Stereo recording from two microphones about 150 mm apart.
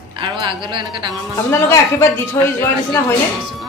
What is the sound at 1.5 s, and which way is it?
A woman's voice, 15° left (ahead or behind).